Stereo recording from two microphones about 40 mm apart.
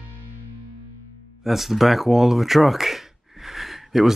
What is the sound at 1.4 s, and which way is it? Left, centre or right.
Speech, centre.